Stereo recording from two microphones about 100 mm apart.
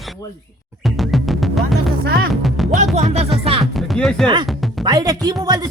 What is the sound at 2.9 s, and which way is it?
Music, 90° right.